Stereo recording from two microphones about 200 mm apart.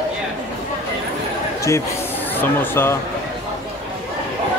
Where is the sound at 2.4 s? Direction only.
10° left (ahead or behind).